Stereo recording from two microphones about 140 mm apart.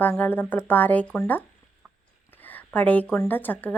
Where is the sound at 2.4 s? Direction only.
10° left (ahead or behind).